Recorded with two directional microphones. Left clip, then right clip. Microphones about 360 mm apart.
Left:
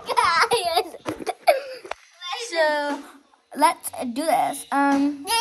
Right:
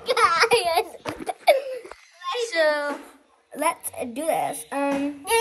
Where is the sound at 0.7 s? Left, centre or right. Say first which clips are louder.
Even; left.